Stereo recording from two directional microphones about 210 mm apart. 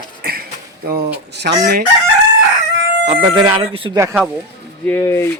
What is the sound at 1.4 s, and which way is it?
Chicken, 45° right (ahead or behind).